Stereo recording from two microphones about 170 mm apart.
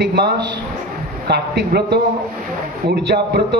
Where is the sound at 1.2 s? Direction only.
75° right (ahead or behind).